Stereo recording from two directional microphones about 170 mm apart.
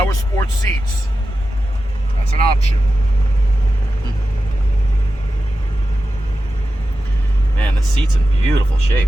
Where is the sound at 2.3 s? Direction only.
40° left (ahead or behind).